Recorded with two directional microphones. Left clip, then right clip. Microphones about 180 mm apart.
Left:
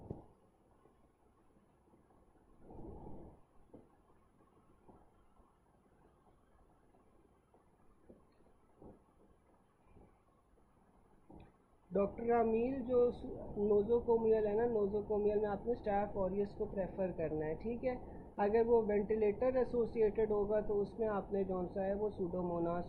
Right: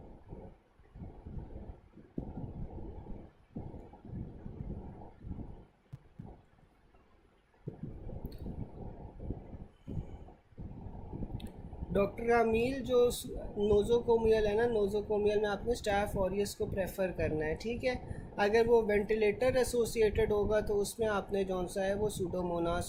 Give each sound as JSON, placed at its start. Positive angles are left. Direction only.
{"t": 11.9, "sound": "speech", "side_deg": -30}